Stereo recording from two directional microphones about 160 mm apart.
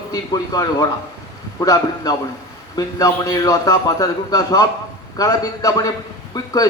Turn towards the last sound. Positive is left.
turn(degrees=25)  # may be behind; listen again after turning